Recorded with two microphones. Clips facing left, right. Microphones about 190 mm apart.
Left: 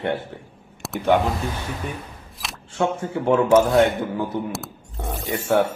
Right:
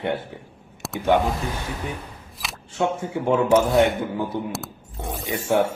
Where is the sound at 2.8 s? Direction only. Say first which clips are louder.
Left 1 dB; 10° right (ahead or behind).